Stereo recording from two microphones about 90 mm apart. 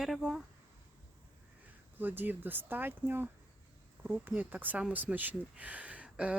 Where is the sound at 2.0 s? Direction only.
20° right (ahead or behind).